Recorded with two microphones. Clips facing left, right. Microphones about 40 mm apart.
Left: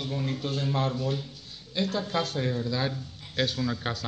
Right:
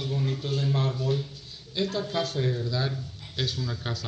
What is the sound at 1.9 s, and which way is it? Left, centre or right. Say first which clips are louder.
A man's voice: even; left.